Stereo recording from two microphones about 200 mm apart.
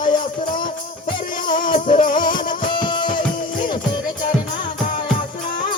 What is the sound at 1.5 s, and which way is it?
Music, 20° left (ahead or behind).